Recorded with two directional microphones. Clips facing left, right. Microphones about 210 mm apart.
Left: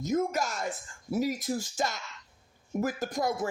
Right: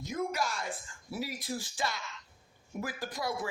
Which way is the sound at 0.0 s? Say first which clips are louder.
Left 5 dB; 45° left (ahead or behind).